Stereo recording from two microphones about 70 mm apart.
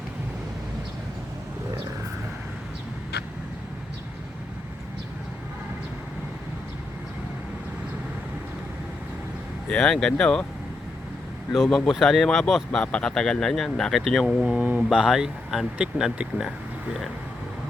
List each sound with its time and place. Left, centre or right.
9.6 s speech: centre
11.5 s speech: centre
12.8 s speech: centre
14.6 s mantra: right
14.8 s speech: centre